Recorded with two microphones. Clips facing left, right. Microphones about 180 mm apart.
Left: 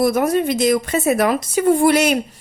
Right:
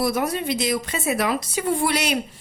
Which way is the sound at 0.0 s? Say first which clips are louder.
Left 7 dB; 50° left (ahead or behind).